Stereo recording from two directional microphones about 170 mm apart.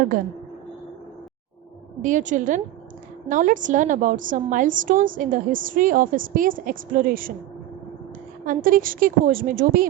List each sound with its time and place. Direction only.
2.0 s a woman's voice: 45° right (ahead or behind)
8.4 s a woman's voice: 55° right (ahead or behind)